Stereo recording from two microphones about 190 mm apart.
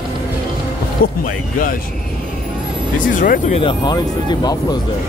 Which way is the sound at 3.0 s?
45° left (ahead or behind).